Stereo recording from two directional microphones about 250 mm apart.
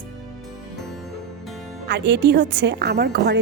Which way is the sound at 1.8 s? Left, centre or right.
Right.